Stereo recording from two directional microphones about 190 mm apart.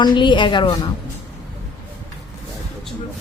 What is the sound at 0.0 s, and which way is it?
Speech, 25° left (ahead or behind).